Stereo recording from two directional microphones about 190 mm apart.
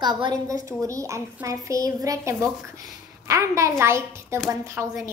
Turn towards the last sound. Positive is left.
turn(degrees=-15)  # may be behind; listen again after turning